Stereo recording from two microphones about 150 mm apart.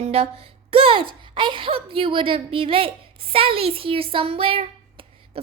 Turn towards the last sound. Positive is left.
turn(degrees=-40)  # may be behind; listen again after turning